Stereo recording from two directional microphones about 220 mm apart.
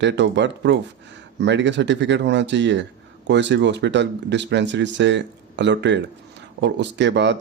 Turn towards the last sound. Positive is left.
turn(degrees=-55)  # may be behind; listen again after turning